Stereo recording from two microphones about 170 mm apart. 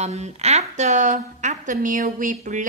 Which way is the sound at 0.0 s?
40° right (ahead or behind).